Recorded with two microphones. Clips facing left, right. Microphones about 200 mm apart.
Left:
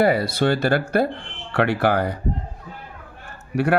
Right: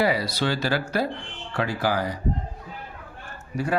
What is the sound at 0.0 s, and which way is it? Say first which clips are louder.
Speech: left 5 dB; 55° left (ahead or behind).